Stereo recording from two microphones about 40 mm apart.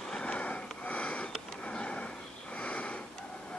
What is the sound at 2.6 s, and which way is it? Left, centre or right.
Sniff, left.